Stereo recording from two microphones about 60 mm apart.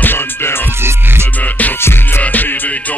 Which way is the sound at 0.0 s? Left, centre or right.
Left.